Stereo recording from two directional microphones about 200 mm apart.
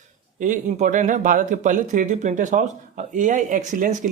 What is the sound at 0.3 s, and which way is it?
Speech, 40° right (ahead or behind).